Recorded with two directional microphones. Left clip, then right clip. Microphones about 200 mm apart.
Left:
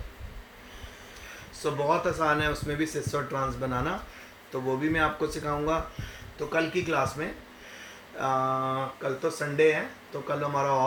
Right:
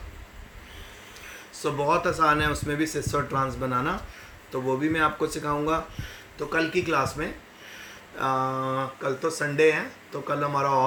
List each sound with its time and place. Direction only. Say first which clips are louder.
1.6 s speech: right 2 dB; 25° right (ahead or behind)